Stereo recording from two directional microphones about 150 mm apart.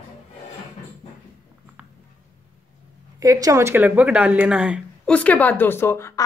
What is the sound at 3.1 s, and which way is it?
Speech, 25° right (ahead or behind).